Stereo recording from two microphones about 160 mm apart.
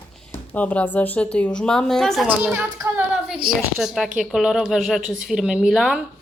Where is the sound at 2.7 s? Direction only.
20° right (ahead or behind).